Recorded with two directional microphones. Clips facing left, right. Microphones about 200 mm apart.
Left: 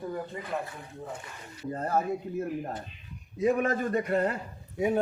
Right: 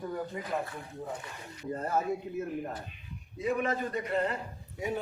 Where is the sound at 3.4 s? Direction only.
45° left (ahead or behind).